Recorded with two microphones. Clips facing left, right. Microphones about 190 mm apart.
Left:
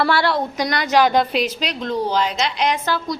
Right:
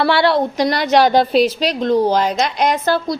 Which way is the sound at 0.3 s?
30° right (ahead or behind).